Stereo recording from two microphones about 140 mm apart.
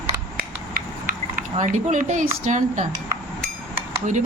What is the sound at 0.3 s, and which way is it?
Mechanisms, 90° right.